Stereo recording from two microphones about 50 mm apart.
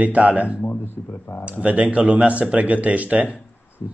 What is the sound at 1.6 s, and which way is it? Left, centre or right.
Speech, right.